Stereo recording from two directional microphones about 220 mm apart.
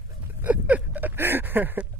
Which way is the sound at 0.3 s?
10° right (ahead or behind).